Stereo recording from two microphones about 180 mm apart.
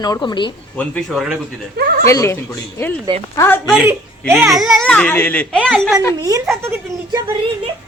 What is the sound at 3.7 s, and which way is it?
Speech, 5° right (ahead or behind).